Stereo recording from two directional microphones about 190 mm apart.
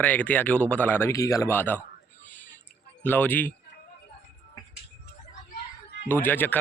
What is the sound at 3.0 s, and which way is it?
Speech, 10° left (ahead or behind).